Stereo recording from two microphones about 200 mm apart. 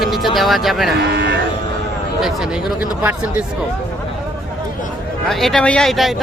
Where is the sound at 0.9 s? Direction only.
60° right (ahead or behind).